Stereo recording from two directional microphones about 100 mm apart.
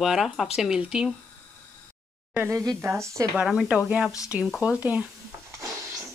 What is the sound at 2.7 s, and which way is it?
Speech, 25° right (ahead or behind).